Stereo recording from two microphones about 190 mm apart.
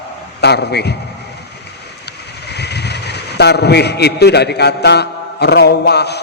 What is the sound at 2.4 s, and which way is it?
A man's voice, 60° left (ahead or behind).